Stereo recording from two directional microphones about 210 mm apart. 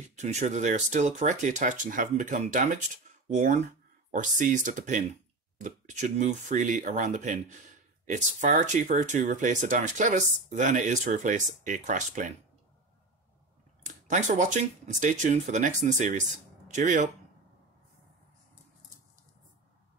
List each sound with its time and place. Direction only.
0.0 s speech: 35° right (ahead or behind)
13.8 s speech: 35° right (ahead or behind)